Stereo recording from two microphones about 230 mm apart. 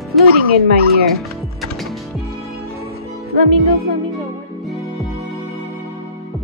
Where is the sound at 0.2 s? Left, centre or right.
Right.